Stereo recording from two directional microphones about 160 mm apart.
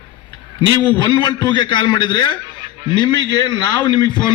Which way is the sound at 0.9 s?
30° left (ahead or behind).